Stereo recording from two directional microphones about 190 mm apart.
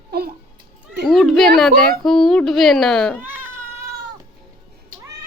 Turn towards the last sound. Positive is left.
turn(degrees=-10)  # may be behind; listen again after turning